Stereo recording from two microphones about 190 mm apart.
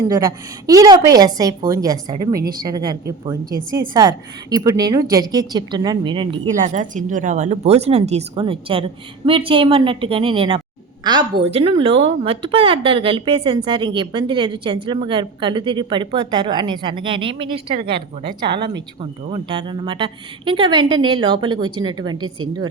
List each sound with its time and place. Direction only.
0.7 s a woman's voice: 20° right (ahead or behind)
6.7 s a woman's voice: 40° right (ahead or behind); by 22.3 s 20° right (ahead or behind)